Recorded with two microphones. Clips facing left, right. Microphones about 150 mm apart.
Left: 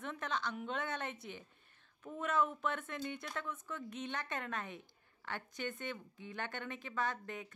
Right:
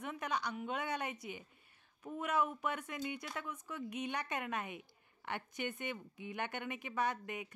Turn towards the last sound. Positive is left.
turn(degrees=-15)  # may be behind; listen again after turning